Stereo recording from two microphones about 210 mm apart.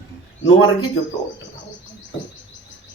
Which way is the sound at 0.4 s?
75° left (ahead or behind).